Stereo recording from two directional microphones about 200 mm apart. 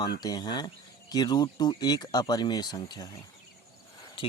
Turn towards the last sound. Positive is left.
turn(degrees=20)  # may be behind; listen again after turning